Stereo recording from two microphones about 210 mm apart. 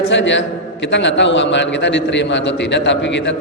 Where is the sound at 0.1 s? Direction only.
60° left (ahead or behind).